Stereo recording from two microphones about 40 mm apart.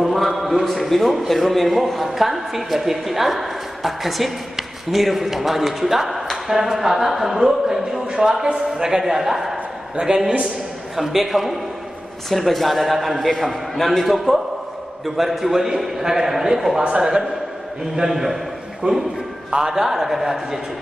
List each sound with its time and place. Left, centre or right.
0.0 s a sound: centre
0.4 s a man's voice: centre
17.9 s speech: centre
18.8 s a man's voice: right
19.5 s speech: centre